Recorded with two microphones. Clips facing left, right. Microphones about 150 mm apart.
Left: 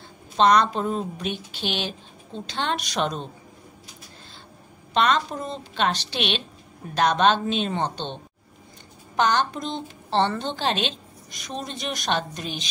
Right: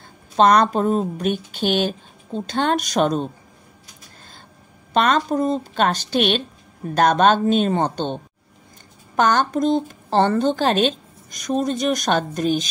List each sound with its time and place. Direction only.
0.4 s a woman's voice: 45° right (ahead or behind)
4.9 s a woman's voice: 45° right (ahead or behind)